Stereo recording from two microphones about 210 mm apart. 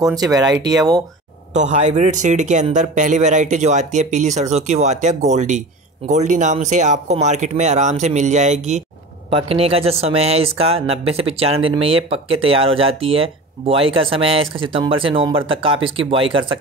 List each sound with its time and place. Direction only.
0.0 s speech: 15° right (ahead or behind)
1.5 s speech: 35° right (ahead or behind)